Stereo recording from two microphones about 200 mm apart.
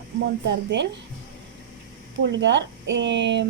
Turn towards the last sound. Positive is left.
turn(degrees=-60)  # may be behind; listen again after turning